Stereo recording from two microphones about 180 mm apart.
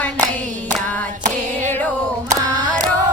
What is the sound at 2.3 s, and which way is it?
Female singing, 20° right (ahead or behind).